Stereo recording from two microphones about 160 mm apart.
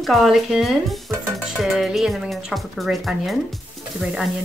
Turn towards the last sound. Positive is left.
turn(degrees=-5)  # may be behind; listen again after turning